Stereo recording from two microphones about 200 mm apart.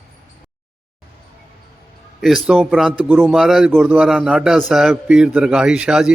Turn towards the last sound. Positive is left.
turn(degrees=-5)  # may be behind; listen again after turning